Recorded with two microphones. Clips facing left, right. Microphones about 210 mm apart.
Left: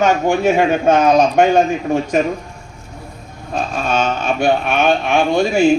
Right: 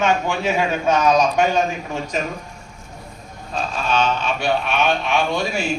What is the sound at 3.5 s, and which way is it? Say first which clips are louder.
A man's voice: left 3 dB; 45° left (ahead or behind).